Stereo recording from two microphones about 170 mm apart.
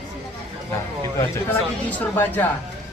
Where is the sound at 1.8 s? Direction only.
10° left (ahead or behind).